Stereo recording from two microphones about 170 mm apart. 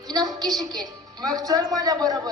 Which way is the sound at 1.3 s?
20° right (ahead or behind).